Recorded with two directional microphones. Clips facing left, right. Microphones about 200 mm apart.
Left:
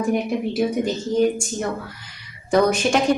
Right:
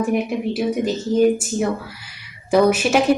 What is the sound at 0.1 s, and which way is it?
Speech, 5° right (ahead or behind).